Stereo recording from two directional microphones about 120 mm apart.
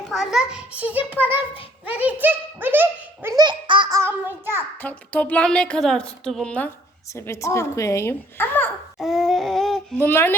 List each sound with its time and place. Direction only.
0.1 s speech: centre (ahead or behind)
3.3 s baby laughter: 40° right (ahead or behind)
3.8 s child singing: 25° right (ahead or behind)
4.1 s speech: 15° right (ahead or behind)
4.8 s a woman's voice: 15° left (ahead or behind)
7.1 s speech: 25° left (ahead or behind)
9.0 s a sound: centre (ahead or behind)
10.0 s a woman's voice: 15° left (ahead or behind)